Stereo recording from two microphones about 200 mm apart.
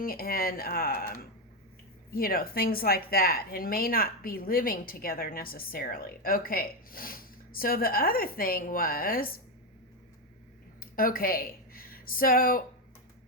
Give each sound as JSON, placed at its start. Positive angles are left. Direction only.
{"t": 0.0, "sound": "a woman's voice", "side_deg": 45}
{"t": 10.8, "sound": "speech", "side_deg": 45}